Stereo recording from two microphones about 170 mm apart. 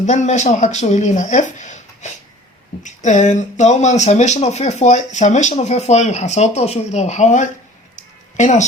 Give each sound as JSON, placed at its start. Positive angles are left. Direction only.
{"t": 0.0, "sound": "speech", "side_deg": 45}